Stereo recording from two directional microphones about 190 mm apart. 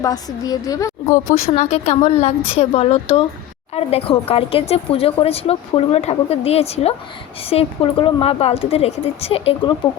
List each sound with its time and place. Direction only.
0.0 s a woman's voice: 20° left (ahead or behind)
1.5 s speech: 35° left (ahead or behind)